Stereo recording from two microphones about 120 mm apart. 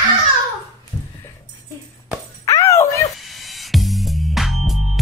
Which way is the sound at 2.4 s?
25° left (ahead or behind).